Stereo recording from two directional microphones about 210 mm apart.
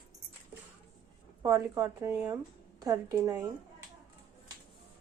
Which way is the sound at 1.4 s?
15° right (ahead or behind).